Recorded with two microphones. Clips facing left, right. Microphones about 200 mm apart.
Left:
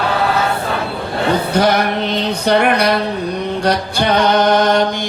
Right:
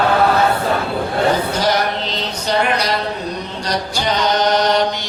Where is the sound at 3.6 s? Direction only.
60° left (ahead or behind).